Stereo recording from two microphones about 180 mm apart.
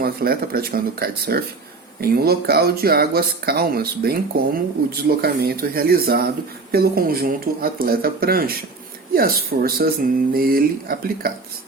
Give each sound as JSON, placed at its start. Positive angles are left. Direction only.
{"t": 0.0, "sound": "speech", "side_deg": -55}